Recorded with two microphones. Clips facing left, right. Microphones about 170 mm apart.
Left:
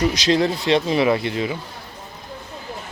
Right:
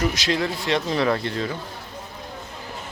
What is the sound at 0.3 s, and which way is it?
Speech, 30° left (ahead or behind).